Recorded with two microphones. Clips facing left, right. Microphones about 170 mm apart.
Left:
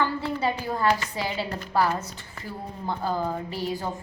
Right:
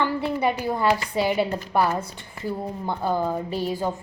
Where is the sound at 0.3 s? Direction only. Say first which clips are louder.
Right 3 dB; 15° right (ahead or behind).